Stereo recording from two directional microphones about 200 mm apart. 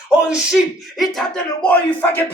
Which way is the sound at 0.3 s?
5° right (ahead or behind).